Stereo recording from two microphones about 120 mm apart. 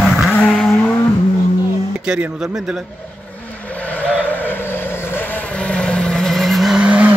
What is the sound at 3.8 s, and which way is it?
Vehicle, 10° left (ahead or behind).